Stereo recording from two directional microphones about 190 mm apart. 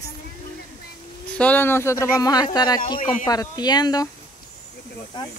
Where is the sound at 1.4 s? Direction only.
10° left (ahead or behind).